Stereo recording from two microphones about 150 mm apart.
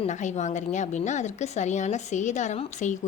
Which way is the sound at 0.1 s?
55° left (ahead or behind).